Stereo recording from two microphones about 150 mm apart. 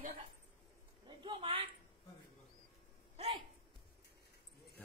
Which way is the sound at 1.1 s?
35° right (ahead or behind).